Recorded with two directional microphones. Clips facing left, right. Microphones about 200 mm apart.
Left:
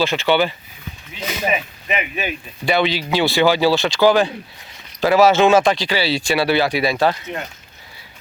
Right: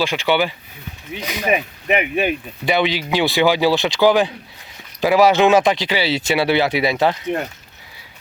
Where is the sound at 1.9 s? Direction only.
60° right (ahead or behind).